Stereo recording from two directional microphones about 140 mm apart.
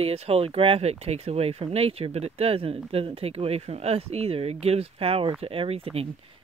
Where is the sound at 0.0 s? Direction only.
45° right (ahead or behind).